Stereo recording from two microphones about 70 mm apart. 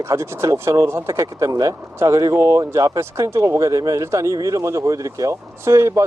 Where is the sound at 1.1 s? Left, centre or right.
Right.